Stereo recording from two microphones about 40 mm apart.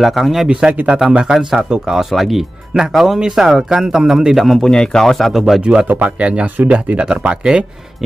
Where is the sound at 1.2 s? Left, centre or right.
Centre.